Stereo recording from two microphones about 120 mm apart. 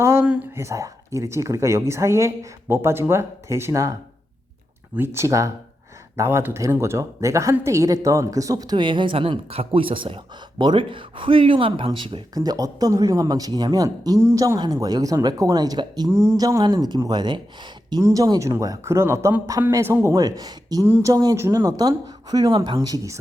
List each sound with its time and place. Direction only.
0.0 s a sound: 20° right (ahead or behind)
0.5 s a woman's voice: 25° right (ahead or behind)
4.9 s a woman's voice: 20° right (ahead or behind)
16.1 s a woman's voice: 20° right (ahead or behind)
20.2 s a woman's voice: 35° right (ahead or behind)